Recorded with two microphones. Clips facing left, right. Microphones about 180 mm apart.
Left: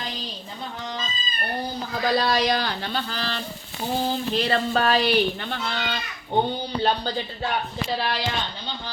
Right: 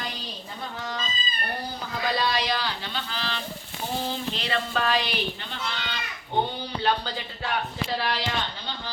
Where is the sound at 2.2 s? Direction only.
45° left (ahead or behind).